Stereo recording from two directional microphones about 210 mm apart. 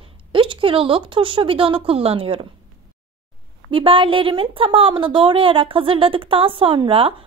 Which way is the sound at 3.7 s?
25° right (ahead or behind).